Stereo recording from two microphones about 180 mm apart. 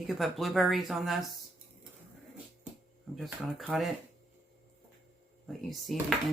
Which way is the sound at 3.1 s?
Centre (ahead or behind).